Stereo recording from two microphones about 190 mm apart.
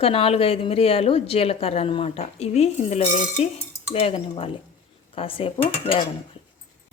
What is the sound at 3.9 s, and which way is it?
Dishes, 30° left (ahead or behind).